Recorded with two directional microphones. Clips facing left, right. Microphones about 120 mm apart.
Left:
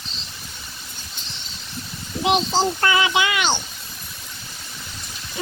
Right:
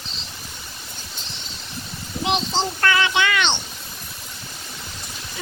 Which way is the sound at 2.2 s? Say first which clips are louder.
Left 4 dB; 5° left (ahead or behind).